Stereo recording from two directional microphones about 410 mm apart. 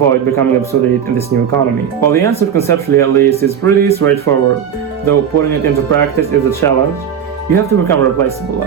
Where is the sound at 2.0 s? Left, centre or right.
Centre.